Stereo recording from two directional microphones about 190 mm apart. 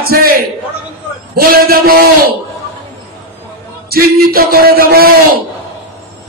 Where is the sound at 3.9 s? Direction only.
50° right (ahead or behind).